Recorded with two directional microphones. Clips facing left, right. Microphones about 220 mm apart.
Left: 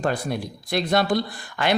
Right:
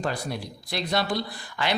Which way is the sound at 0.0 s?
50° left (ahead or behind).